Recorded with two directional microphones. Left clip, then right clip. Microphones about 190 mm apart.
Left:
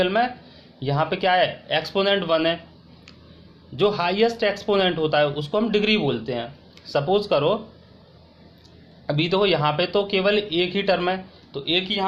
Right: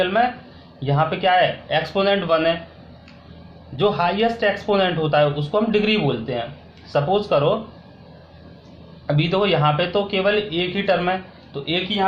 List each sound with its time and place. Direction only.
0.0 s speech: 50° left (ahead or behind)
3.8 s speech: 50° left (ahead or behind)
9.0 s speech: 50° left (ahead or behind)